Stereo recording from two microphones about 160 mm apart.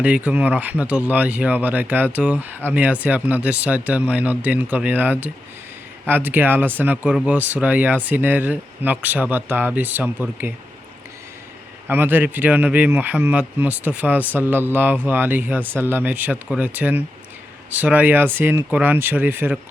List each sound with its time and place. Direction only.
0.0 s speech: 10° right (ahead or behind)
11.9 s speech: 10° right (ahead or behind)